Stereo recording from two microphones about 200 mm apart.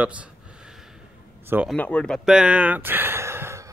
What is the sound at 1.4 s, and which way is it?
Speech, 10° right (ahead or behind).